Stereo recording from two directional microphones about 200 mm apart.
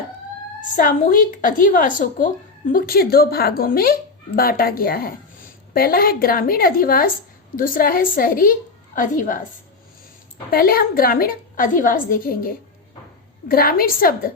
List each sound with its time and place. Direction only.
0.8 s a woman's voice: 45° left (ahead or behind)
10.5 s speech: 45° left (ahead or behind)